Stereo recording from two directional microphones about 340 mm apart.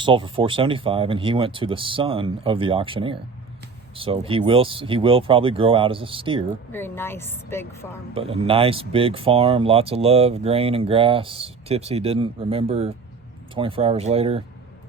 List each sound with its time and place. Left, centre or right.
0.0 s speech: centre
6.7 s a woman's voice: centre
8.1 s speech: centre